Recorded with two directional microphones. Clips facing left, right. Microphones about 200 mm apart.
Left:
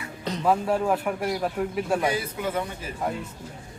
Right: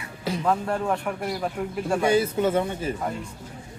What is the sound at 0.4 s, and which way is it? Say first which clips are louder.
A man's voice: left 3 dB; 5° left (ahead or behind).